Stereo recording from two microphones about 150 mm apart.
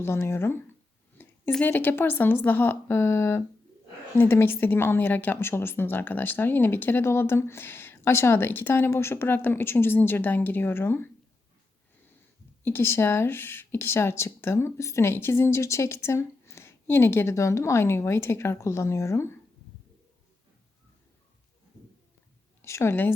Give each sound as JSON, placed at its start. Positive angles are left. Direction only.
{"t": 0.0, "sound": "a woman's voice", "side_deg": 20}
{"t": 12.6, "sound": "a woman's voice", "side_deg": 15}
{"t": 22.6, "sound": "a woman's voice", "side_deg": 20}